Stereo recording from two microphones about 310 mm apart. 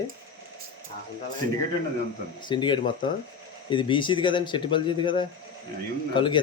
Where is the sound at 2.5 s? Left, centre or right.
Centre.